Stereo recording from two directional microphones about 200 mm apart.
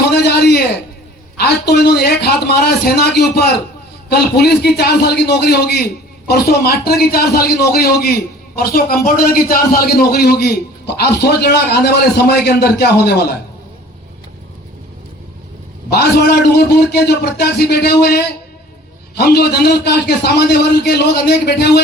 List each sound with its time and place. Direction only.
0.1 s a sound: 55° left (ahead or behind)
1.4 s a man's voice: 55° left (ahead or behind)
15.9 s a man's voice: 50° left (ahead or behind)